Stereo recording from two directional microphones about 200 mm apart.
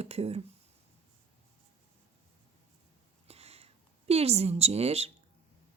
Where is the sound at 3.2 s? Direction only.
30° right (ahead or behind).